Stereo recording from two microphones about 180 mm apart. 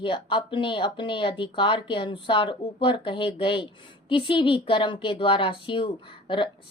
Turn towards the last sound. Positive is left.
turn(degrees=30)  # may be behind; listen again after turning